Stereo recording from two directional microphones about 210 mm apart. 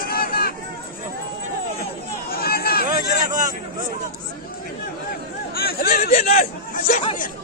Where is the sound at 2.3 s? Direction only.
45° left (ahead or behind).